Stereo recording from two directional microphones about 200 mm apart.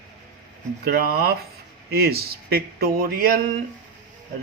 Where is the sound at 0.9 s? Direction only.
50° right (ahead or behind).